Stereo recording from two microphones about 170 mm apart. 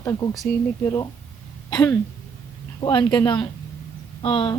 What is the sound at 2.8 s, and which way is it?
A woman's voice, 25° left (ahead or behind).